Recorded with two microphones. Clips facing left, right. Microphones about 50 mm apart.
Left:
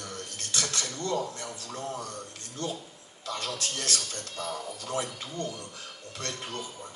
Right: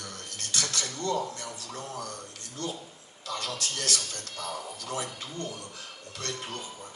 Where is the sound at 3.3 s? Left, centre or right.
Left.